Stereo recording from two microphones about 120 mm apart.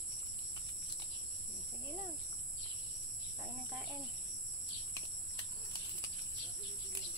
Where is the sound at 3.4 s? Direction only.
15° right (ahead or behind).